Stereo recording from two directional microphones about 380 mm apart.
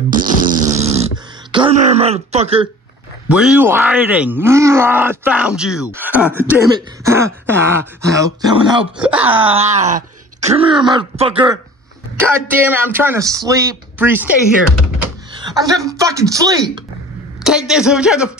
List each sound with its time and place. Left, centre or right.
0.1 s fart: right
0.7 s dog: centre
1.5 s speech: centre
3.3 s speech: centre
9.6 s speech: centre
15.5 s speech: centre